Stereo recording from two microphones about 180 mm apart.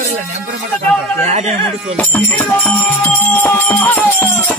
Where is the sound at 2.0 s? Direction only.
10° left (ahead or behind).